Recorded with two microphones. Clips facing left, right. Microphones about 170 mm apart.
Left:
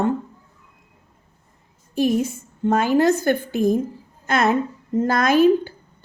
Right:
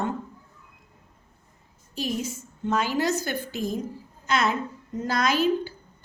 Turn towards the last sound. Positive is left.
turn(degrees=50)  # may be behind; listen again after turning